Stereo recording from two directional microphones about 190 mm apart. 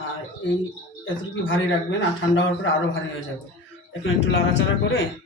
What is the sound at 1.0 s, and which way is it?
A man's voice, 90° left.